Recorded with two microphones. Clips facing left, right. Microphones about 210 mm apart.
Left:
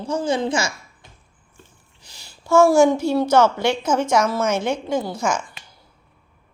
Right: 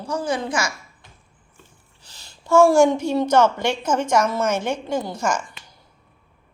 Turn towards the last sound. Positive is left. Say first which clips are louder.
# left 2 dB
turn(degrees=5)  # may be behind; listen again after turning